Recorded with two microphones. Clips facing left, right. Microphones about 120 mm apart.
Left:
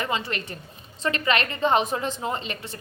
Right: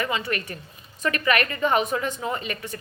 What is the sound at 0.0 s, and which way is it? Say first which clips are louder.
A woman's voice: right 1 dB; 30° left (ahead or behind).